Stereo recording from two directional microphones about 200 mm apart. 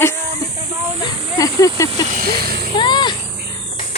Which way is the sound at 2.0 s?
45° right (ahead or behind).